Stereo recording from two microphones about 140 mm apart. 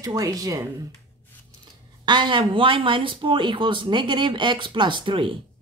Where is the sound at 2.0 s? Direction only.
35° right (ahead or behind).